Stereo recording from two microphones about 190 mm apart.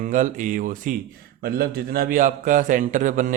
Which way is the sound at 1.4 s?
55° right (ahead or behind).